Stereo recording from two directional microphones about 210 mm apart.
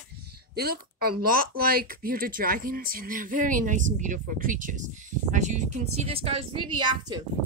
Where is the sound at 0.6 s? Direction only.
45° right (ahead or behind).